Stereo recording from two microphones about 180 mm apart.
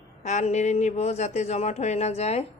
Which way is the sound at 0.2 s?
40° left (ahead or behind).